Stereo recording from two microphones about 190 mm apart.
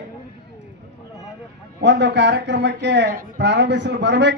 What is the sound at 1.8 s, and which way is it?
Speech, 65° right (ahead or behind).